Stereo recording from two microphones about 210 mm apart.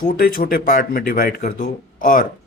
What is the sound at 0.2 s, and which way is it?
A man's voice, 45° left (ahead or behind).